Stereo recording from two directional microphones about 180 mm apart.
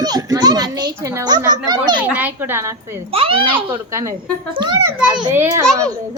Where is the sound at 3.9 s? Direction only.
15° right (ahead or behind).